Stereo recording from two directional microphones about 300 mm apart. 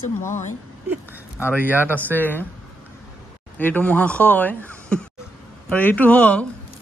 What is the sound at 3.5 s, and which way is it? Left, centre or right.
Speech, centre.